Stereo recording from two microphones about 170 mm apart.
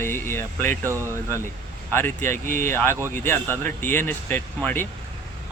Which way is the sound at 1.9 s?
15° left (ahead or behind).